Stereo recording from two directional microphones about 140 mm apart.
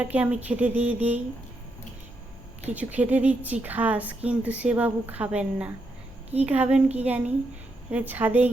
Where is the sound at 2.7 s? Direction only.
10° right (ahead or behind).